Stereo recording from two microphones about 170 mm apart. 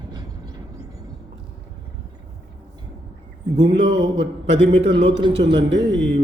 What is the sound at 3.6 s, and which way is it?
Speech, 35° right (ahead or behind).